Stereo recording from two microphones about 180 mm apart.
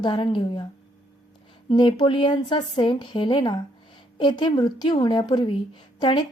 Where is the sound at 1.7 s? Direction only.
25° left (ahead or behind).